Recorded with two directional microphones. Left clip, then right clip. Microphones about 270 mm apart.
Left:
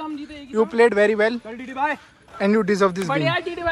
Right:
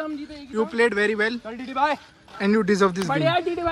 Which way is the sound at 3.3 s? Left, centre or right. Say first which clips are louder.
Right 1 dB; left.